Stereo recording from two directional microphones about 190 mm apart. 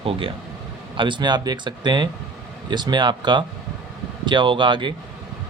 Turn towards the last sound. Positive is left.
turn(degrees=-25)  # may be behind; listen again after turning